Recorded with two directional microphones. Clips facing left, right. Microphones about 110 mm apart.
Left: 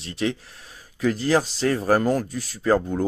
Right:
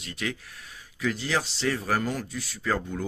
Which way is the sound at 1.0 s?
45° left (ahead or behind).